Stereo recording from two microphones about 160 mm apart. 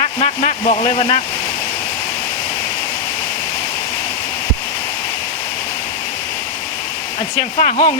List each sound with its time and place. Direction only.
0.0 s vehicle: 40° left (ahead or behind)
7.6 s speech: 50° left (ahead or behind)